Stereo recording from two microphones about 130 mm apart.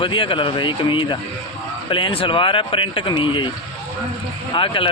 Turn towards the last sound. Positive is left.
turn(degrees=40)  # may be behind; listen again after turning